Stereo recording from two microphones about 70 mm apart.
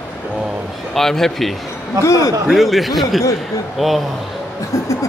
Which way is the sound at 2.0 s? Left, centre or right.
Left.